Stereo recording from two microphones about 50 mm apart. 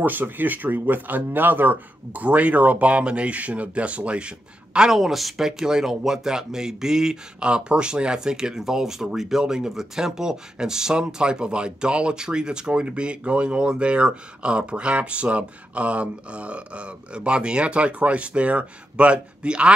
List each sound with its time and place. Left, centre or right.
0.0 s speech: right
2.2 s speech: right
4.9 s speech: centre; by 19.7 s right